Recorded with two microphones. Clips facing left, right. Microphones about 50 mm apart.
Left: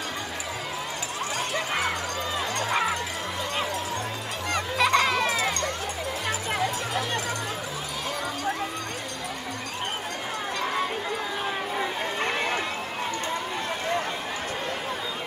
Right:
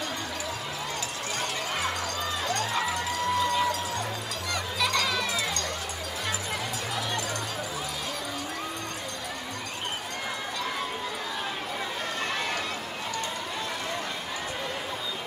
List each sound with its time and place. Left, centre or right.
2.5 s music: left
4.5 s music: left
12.2 s run: left